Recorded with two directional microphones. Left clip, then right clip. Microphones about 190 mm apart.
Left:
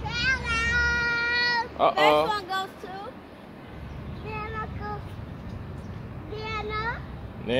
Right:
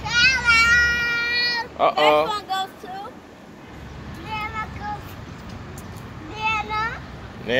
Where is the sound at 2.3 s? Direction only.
15° left (ahead or behind).